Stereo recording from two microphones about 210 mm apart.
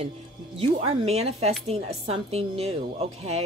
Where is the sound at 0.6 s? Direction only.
30° right (ahead or behind).